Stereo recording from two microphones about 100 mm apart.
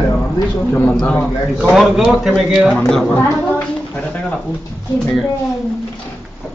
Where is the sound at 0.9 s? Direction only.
10° left (ahead or behind).